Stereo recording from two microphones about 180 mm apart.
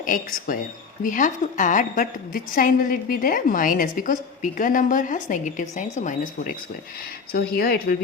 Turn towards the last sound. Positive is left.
turn(degrees=55)  # may be behind; listen again after turning